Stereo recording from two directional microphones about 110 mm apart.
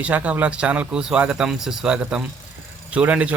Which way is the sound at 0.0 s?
15° right (ahead or behind).